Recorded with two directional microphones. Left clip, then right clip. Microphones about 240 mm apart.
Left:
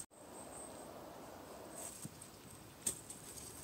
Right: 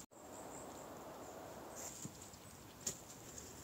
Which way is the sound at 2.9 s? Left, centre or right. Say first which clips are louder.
Left 2 dB; left.